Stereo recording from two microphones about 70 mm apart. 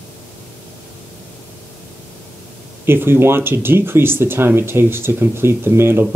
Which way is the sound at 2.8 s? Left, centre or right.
Right.